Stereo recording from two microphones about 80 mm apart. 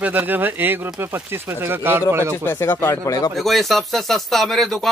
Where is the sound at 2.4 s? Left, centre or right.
Left.